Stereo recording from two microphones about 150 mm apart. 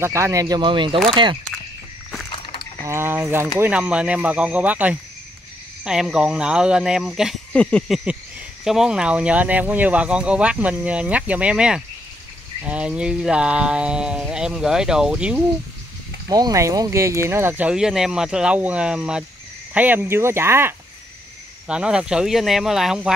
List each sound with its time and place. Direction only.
0.0 s speech: 20° right (ahead or behind)
2.3 s a sound: 35° left (ahead or behind)
2.9 s speech: 15° right (ahead or behind)
16.3 s speech: 25° right (ahead or behind)
21.6 s speech: 5° right (ahead or behind)